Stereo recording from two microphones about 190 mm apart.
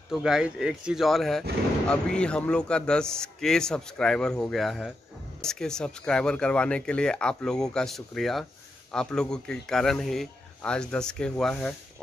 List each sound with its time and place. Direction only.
0.1 s a man's voice: 5° right (ahead or behind)